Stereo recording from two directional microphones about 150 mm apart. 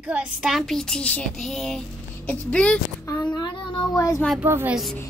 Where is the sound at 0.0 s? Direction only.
5° right (ahead or behind).